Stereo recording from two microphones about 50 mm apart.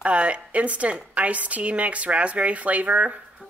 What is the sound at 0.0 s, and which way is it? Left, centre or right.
Speech, right.